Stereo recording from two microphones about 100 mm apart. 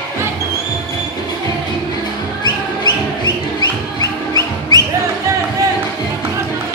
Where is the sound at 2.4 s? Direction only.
45° left (ahead or behind).